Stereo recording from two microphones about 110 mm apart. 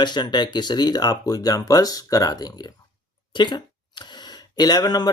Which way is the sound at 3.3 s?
45° left (ahead or behind).